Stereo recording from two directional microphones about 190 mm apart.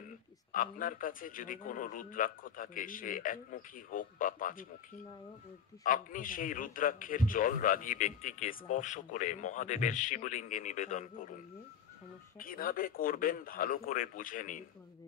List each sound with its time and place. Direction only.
0.5 s a man's voice: 45° left (ahead or behind)
5.9 s a man's voice: 45° left (ahead or behind)
12.4 s a man's voice: 50° left (ahead or behind)